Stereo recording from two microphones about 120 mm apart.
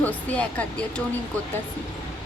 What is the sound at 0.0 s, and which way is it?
Speech, 10° left (ahead or behind).